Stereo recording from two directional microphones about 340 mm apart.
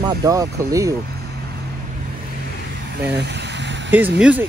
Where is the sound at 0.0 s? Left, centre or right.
Centre.